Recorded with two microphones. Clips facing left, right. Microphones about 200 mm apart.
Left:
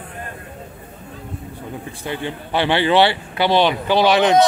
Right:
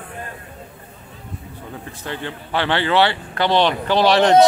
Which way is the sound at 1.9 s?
15° left (ahead or behind).